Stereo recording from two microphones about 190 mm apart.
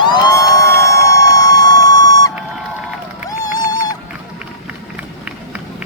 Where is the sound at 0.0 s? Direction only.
20° left (ahead or behind).